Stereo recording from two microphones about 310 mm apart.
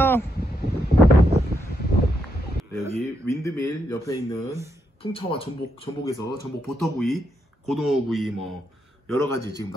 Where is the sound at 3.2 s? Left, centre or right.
Centre.